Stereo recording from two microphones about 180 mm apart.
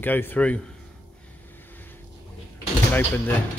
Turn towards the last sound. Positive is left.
turn(degrees=10)  # may be behind; listen again after turning